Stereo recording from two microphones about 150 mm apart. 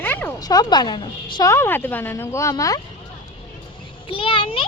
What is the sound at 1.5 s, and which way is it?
Speech, 15° left (ahead or behind).